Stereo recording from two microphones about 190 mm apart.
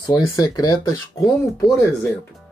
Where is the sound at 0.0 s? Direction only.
20° left (ahead or behind).